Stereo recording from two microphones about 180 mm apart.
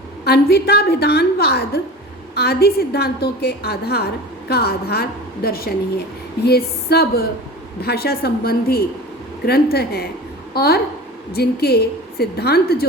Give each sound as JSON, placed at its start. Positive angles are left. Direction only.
{"t": 0.3, "sound": "a woman's voice", "side_deg": 65}